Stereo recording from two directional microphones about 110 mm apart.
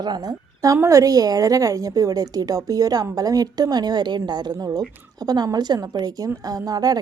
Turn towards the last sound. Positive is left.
turn(degrees=-35)  # may be behind; listen again after turning